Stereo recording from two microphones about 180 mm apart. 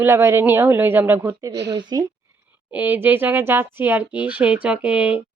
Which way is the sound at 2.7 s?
10° right (ahead or behind).